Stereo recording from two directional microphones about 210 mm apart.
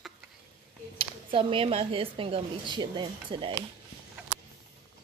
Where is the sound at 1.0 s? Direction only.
25° right (ahead or behind).